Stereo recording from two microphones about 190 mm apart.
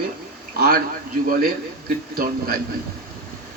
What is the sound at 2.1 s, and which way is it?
Speech, 50° right (ahead or behind).